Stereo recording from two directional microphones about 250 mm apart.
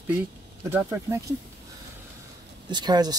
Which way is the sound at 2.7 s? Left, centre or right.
Centre.